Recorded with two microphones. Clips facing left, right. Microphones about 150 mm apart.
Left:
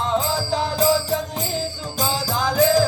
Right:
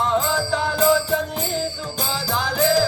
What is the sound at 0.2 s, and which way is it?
Music, 35° left (ahead or behind).